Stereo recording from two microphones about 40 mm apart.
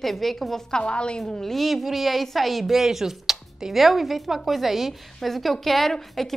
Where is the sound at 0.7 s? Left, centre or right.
Left.